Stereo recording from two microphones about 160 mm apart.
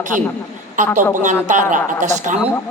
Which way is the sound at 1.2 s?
50° right (ahead or behind).